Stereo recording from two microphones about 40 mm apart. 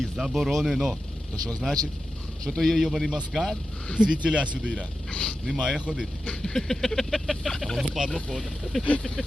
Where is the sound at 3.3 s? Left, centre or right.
Centre.